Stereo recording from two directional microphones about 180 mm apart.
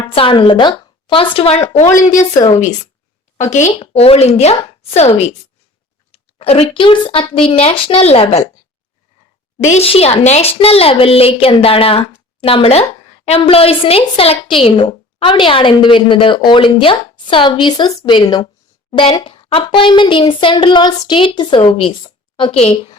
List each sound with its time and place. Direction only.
0.1 s a woman's voice: 30° left (ahead or behind)
2.1 s a woman's voice: 20° left (ahead or behind)
3.3 s a woman's voice: 40° left (ahead or behind)
9.6 s a woman's voice: 35° left (ahead or behind)